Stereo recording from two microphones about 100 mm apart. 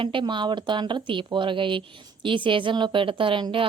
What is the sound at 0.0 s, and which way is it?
A woman's voice, 55° right (ahead or behind).